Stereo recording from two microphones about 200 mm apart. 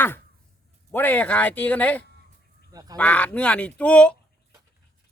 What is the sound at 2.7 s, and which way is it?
Goose, 20° right (ahead or behind).